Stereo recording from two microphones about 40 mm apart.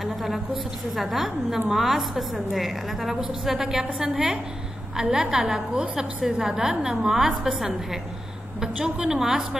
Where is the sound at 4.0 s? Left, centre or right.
Right.